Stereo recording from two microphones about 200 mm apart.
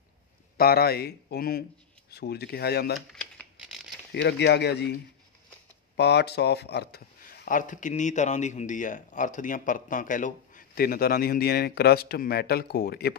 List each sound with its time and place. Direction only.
0.6 s speech: 50° left (ahead or behind)
3.1 s a sound: 5° left (ahead or behind)
4.1 s speech: 60° left (ahead or behind)
5.9 s speech: 55° left (ahead or behind)